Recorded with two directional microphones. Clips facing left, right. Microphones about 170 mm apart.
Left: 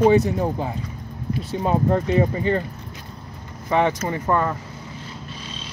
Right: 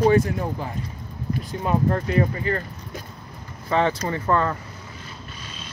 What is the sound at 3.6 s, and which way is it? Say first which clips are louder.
Speech: left 2 dB; 15° left (ahead or behind).